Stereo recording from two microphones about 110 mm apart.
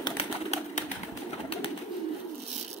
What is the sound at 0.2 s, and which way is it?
Bird, 75° left (ahead or behind).